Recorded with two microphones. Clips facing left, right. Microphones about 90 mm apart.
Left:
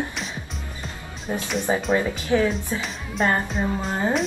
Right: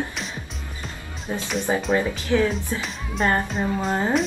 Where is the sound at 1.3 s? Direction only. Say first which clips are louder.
Left 1 dB; 15° left (ahead or behind).